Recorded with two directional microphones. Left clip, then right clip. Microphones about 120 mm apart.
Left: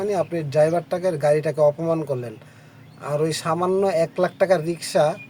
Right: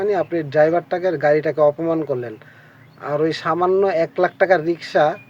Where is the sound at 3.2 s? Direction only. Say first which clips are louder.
Right 4 dB; 40° left (ahead or behind).